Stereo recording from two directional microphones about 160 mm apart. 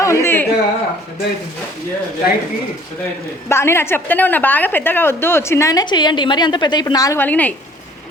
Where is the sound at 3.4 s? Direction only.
15° left (ahead or behind).